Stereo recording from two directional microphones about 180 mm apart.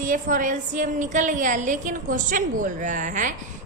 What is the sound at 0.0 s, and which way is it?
A woman's voice, 50° right (ahead or behind).